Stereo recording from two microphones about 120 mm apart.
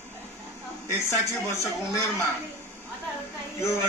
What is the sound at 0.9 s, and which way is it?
A man's voice, 25° left (ahead or behind).